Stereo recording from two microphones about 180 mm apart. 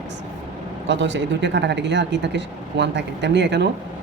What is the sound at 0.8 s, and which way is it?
Speech, 80° right.